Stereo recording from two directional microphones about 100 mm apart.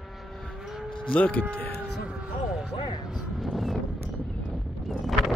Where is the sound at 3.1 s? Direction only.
Centre (ahead or behind).